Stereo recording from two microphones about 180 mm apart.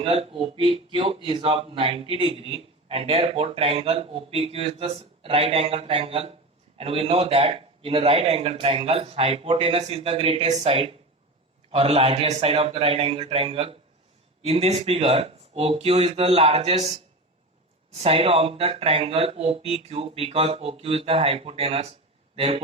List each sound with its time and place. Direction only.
0.0 s a man's voice: 30° right (ahead or behind)